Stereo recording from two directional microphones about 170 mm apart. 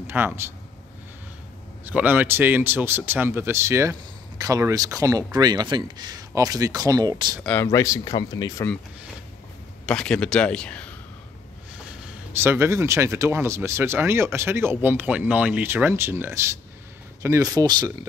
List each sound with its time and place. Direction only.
0.0 s speech: 10° right (ahead or behind)
1.9 s speech: 10° right (ahead or behind)
7.4 s speech: 15° left (ahead or behind)
9.8 s a man's voice: 5° left (ahead or behind)
12.3 s speech: 15° right (ahead or behind)